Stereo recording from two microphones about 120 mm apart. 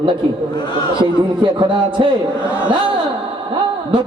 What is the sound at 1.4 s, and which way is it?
Speech, 45° right (ahead or behind).